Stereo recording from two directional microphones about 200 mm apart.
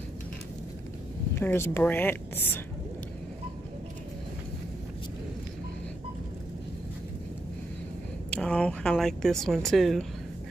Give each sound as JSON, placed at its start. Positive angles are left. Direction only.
{"t": 1.3, "sound": "speech", "side_deg": 10}
{"t": 8.3, "sound": "speech", "side_deg": 5}